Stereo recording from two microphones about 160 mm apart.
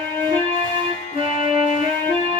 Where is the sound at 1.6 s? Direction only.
55° left (ahead or behind).